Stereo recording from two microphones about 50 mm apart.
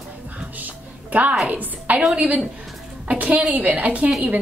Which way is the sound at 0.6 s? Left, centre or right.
Right.